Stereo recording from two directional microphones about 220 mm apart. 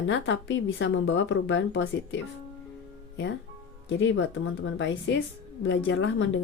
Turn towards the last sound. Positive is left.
turn(degrees=55)  # may be behind; listen again after turning